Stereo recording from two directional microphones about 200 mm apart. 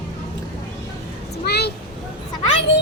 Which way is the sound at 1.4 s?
55° left (ahead or behind).